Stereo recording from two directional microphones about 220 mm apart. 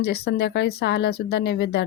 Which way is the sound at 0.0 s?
45° left (ahead or behind).